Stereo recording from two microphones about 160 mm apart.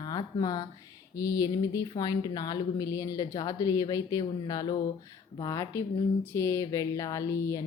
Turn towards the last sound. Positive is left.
turn(degrees=20)  # may be behind; listen again after turning